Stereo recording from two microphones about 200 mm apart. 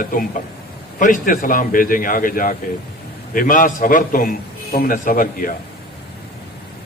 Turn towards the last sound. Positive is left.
turn(degrees=45)  # may be behind; listen again after turning